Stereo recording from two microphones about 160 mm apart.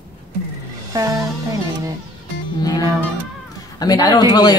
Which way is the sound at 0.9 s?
20° right (ahead or behind).